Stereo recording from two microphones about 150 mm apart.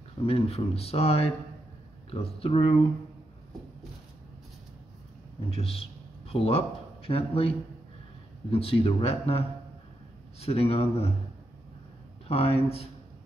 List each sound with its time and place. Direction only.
0.3 s speech: 40° left (ahead or behind)
5.5 s a man's voice: 40° left (ahead or behind)
10.4 s speech: 40° left (ahead or behind)
12.3 s speech: 40° left (ahead or behind)